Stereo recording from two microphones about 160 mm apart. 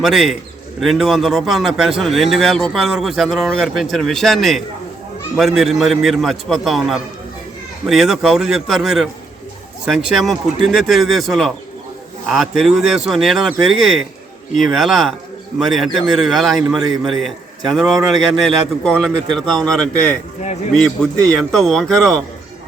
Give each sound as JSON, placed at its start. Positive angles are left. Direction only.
{"t": 0.0, "sound": "speech", "side_deg": 0}